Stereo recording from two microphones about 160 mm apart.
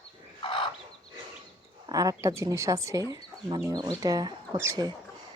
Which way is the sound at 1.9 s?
20° right (ahead or behind).